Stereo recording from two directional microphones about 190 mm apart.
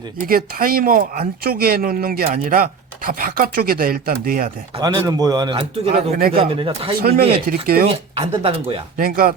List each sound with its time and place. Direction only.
0.3 s speech: 50° right (ahead or behind)
4.8 s speech: 20° right (ahead or behind)
6.1 s speech: 50° right (ahead or behind)
6.4 s speech: 30° right (ahead or behind)
7.4 s speech: 50° right (ahead or behind)
8.1 s speech: 30° right (ahead or behind)
9.0 s speech: 50° right (ahead or behind)